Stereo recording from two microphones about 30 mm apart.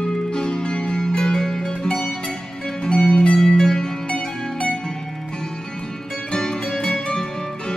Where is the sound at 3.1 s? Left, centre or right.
Left.